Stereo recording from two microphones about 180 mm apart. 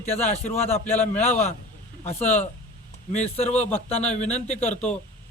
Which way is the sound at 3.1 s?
35° left (ahead or behind).